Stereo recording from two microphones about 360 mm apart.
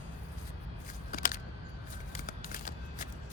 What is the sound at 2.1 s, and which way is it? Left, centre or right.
Shuffling cards, left.